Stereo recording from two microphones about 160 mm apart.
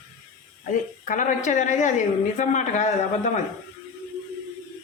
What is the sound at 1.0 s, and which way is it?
A woman's voice, 55° left (ahead or behind).